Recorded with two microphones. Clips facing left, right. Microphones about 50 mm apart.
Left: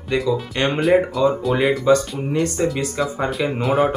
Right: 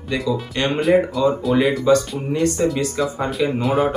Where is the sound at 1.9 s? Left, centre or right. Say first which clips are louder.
Even; centre.